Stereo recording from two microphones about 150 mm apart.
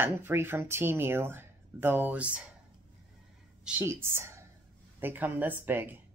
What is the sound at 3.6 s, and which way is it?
A woman's voice, 15° right (ahead or behind).